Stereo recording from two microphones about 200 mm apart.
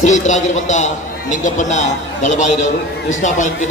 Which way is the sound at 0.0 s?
35° left (ahead or behind).